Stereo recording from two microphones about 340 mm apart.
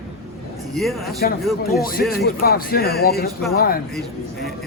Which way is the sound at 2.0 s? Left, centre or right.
Left.